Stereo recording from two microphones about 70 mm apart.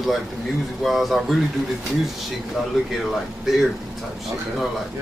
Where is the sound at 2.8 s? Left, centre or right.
Centre.